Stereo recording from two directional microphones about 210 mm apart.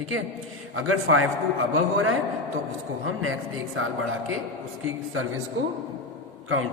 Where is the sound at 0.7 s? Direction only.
85° right.